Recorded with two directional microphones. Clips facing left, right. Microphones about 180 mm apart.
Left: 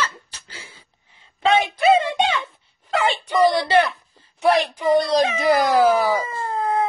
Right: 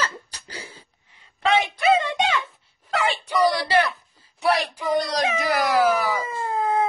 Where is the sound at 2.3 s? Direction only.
Centre (ahead or behind).